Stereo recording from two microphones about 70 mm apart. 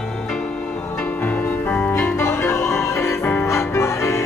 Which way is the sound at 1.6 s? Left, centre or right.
Left.